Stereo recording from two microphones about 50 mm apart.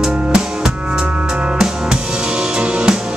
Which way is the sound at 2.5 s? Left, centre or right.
Centre.